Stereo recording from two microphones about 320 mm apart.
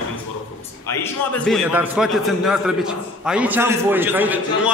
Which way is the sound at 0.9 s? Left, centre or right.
Centre.